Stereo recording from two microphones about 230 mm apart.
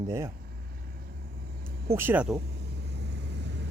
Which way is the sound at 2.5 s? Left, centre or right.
Right.